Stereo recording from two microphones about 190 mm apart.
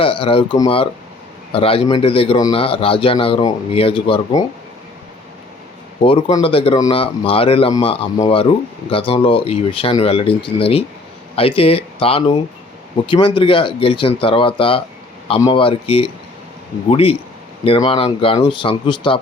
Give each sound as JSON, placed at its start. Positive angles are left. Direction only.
{"t": 0.0, "sound": "speech", "side_deg": 30}
{"t": 6.0, "sound": "speech", "side_deg": 30}